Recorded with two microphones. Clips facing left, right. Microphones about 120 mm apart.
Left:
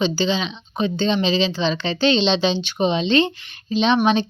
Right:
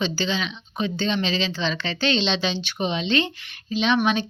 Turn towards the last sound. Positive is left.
turn(degrees=30)  # may be behind; listen again after turning